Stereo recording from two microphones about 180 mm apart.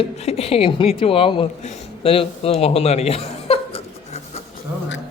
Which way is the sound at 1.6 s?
35° left (ahead or behind).